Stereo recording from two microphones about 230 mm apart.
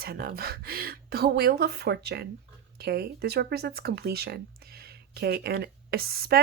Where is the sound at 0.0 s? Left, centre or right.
Right.